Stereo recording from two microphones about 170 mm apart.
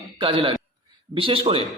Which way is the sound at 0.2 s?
30° right (ahead or behind).